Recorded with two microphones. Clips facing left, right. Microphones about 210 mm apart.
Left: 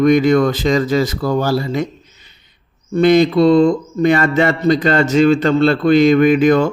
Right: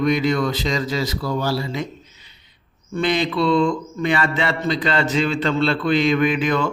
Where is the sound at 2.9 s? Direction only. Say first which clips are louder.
Left 9 dB; 45° left (ahead or behind).